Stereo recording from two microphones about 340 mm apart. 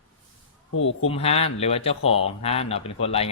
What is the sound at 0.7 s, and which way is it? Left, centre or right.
Speech, left.